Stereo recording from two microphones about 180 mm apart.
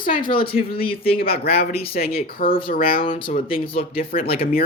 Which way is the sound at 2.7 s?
55° left (ahead or behind).